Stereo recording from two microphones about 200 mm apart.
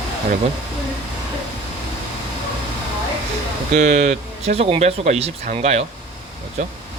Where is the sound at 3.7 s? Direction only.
35° right (ahead or behind).